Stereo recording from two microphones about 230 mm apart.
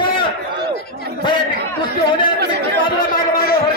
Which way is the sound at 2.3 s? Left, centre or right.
Right.